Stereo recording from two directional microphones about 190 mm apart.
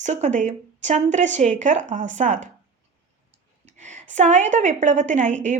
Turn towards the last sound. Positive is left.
turn(degrees=-40)  # may be behind; listen again after turning